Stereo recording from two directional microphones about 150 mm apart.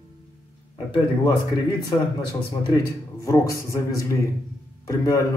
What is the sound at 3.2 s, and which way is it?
Speech, 20° left (ahead or behind).